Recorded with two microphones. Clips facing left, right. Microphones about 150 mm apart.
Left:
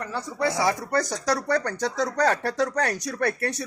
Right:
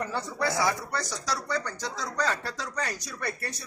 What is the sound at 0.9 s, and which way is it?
Speech, 55° left (ahead or behind).